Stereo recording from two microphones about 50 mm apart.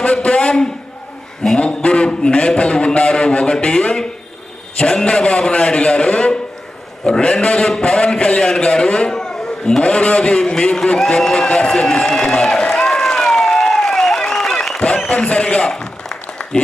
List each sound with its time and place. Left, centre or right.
0.0 s a man's voice: centre
12.7 s applause: centre
15.1 s a man's voice: left
15.7 s a sound: centre